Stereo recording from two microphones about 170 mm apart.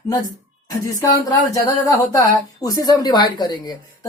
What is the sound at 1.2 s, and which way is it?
Speech, 20° left (ahead or behind).